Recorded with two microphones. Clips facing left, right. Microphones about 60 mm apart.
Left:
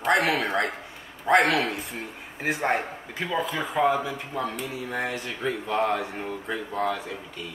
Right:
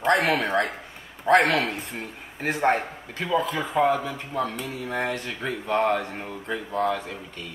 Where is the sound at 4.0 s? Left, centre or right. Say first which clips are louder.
Right 1 dB; centre.